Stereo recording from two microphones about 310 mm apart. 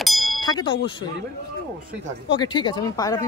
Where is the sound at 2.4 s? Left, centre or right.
Centre.